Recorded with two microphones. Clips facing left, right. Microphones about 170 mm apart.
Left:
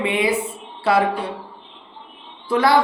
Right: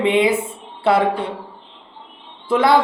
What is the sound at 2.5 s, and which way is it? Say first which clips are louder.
Speech: right 2 dB; 20° right (ahead or behind).